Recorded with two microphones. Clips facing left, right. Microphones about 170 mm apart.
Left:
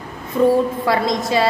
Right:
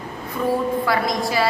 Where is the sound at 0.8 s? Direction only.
25° left (ahead or behind).